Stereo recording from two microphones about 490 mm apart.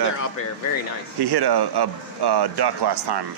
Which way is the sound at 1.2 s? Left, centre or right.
Right.